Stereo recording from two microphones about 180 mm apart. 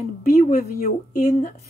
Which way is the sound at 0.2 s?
45° left (ahead or behind).